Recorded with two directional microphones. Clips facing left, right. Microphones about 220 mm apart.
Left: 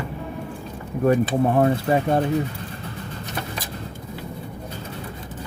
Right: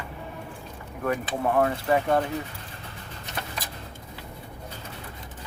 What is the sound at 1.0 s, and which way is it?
Speech, 30° left (ahead or behind).